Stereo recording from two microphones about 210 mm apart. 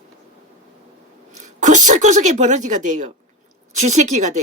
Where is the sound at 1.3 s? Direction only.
35° right (ahead or behind).